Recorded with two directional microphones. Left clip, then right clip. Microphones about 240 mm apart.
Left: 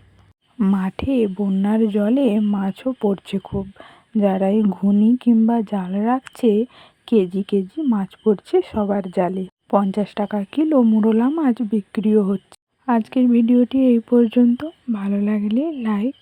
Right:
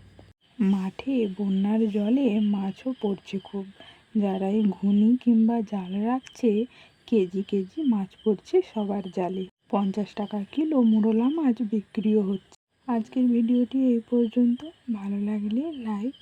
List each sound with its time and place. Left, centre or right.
0.6 s speech: centre